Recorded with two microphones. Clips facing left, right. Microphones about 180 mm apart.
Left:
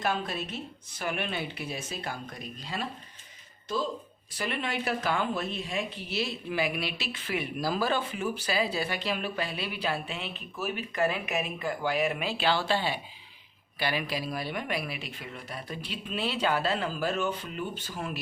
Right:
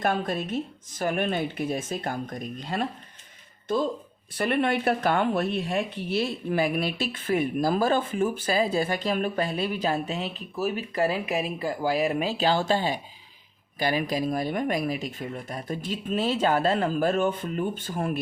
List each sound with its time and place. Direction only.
0.0 s speech: 50° right (ahead or behind)
4.4 s speech: 55° right (ahead or behind)